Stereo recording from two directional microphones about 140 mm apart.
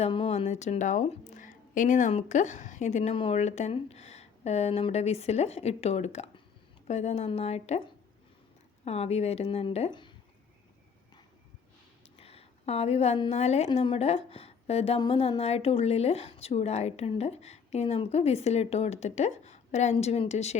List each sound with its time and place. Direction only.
0.1 s a woman's voice: 45° left (ahead or behind)
8.8 s a woman's voice: 50° left (ahead or behind)
12.1 s a sound: 45° left (ahead or behind)
13.3 s a woman's voice: 50° left (ahead or behind)